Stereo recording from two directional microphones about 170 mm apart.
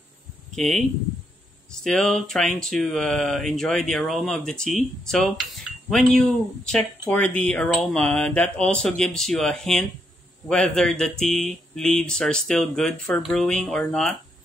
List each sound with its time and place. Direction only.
0.6 s speech: centre (ahead or behind)